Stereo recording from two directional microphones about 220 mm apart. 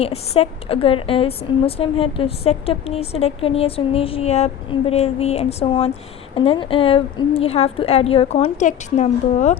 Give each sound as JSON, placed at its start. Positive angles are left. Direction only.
{"t": 0.0, "sound": "a woman's voice", "side_deg": 25}